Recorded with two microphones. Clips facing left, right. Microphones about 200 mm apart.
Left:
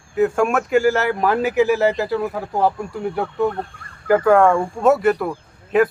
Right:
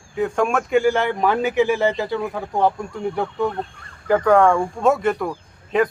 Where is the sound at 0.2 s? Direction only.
5° left (ahead or behind).